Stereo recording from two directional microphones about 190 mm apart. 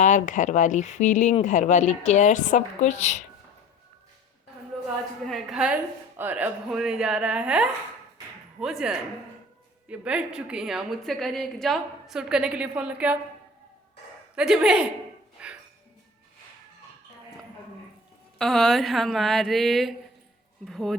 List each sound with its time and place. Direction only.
0.0 s speech: 40° left (ahead or behind)
5.2 s a woman's voice: centre (ahead or behind)
14.3 s a woman's voice: 5° right (ahead or behind)
15.4 s music: 5° right (ahead or behind)
18.3 s a woman's voice: centre (ahead or behind)